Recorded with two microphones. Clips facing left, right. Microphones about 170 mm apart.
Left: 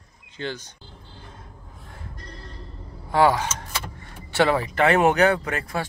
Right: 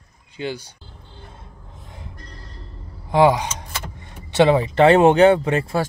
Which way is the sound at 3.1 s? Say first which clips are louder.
Right 3 dB; 15° right (ahead or behind).